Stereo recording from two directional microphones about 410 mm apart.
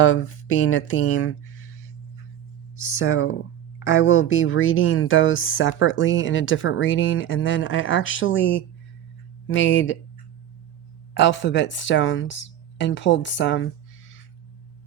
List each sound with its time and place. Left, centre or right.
0.0 s speech: left
2.8 s speech: left
11.1 s speech: left